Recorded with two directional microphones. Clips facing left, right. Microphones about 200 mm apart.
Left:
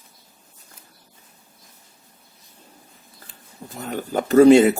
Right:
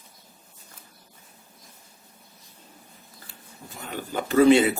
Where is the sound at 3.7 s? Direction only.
45° left (ahead or behind).